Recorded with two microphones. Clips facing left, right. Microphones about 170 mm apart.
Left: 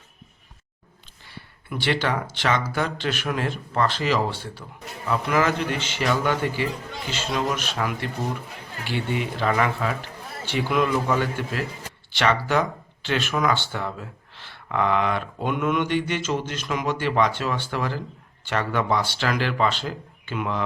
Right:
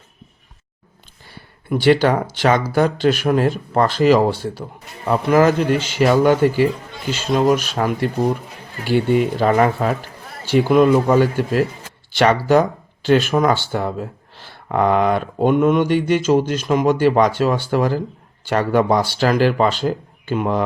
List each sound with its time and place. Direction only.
1.7 s speech: 45° right (ahead or behind)